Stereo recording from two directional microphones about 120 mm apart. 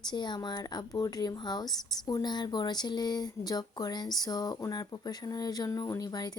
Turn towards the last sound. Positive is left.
turn(degrees=35)  # may be behind; listen again after turning